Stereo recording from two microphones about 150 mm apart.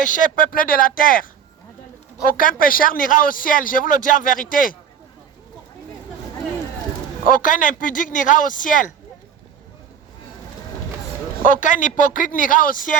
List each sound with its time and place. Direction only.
0.0 s a man's voice: 60° left (ahead or behind)
2.3 s a man's voice: 65° left (ahead or behind)
7.3 s speech: 65° left (ahead or behind)
11.4 s speech: 60° left (ahead or behind)